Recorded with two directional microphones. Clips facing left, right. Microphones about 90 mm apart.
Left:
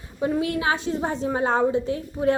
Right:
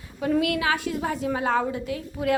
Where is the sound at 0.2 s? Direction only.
25° left (ahead or behind).